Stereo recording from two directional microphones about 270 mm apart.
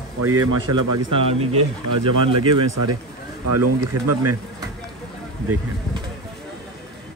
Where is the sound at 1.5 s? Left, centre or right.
Right.